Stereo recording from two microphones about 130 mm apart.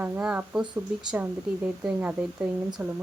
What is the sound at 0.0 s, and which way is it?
A woman's voice, 10° right (ahead or behind).